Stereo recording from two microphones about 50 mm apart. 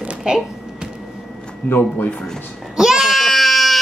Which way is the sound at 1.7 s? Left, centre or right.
Left.